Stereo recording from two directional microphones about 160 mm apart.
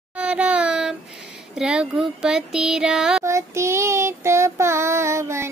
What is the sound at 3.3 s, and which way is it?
Child singing, 15° right (ahead or behind).